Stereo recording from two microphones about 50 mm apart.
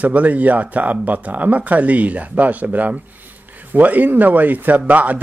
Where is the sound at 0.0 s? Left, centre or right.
Right.